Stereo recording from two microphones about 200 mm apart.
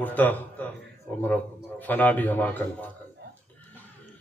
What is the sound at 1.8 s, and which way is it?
Speech, 10° left (ahead or behind).